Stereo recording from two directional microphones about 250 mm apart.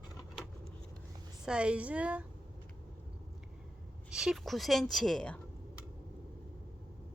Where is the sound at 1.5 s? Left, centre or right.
Centre.